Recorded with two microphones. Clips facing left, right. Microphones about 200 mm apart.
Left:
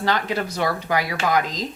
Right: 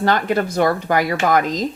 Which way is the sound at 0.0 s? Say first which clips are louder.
Right 5 dB; 50° right (ahead or behind).